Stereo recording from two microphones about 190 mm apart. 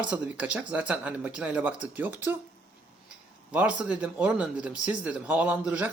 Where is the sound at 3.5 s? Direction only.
5° right (ahead or behind).